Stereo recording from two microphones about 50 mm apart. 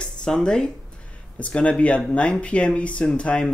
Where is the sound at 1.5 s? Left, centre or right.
Left.